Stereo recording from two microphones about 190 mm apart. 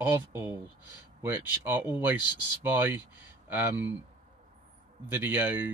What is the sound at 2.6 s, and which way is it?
Speech, 10° right (ahead or behind).